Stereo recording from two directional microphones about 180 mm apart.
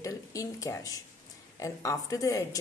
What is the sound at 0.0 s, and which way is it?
A woman's voice, 20° left (ahead or behind).